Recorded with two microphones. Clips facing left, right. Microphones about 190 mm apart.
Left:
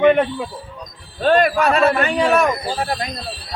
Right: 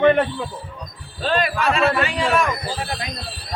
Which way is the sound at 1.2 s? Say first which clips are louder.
Left 6 dB; 50° left (ahead or behind).